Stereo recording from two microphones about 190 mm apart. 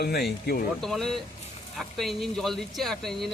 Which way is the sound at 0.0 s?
55° left (ahead or behind).